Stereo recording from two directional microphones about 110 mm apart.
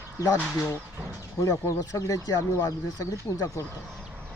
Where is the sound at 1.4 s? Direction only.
30° left (ahead or behind).